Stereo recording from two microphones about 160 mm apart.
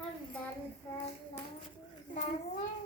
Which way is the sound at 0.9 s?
15° left (ahead or behind).